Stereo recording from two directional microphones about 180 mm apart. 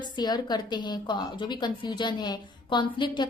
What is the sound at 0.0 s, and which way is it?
A woman's voice, 20° left (ahead or behind).